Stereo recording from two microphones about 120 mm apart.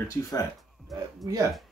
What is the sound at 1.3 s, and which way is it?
Speech, 30° right (ahead or behind).